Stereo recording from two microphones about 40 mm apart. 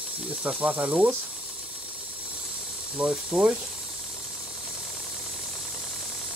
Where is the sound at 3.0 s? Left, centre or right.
Centre.